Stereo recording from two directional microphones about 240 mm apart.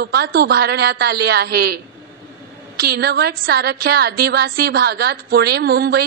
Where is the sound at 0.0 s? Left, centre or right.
Right.